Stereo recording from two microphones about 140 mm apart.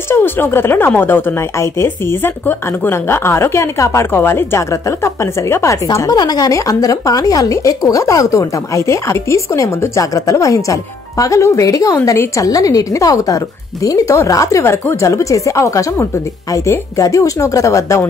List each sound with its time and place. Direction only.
0.1 s a woman's voice: 15° left (ahead or behind)